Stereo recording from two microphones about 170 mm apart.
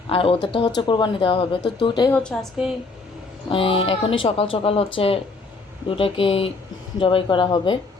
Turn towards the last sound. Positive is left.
turn(degrees=30)  # may be behind; listen again after turning